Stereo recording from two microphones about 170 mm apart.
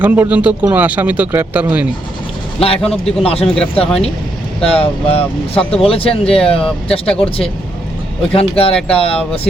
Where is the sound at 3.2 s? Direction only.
35° left (ahead or behind).